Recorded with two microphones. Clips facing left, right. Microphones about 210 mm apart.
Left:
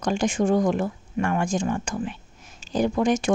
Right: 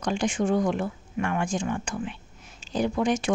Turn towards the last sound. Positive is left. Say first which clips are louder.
# left 3 dB
turn(degrees=45)  # may be behind; listen again after turning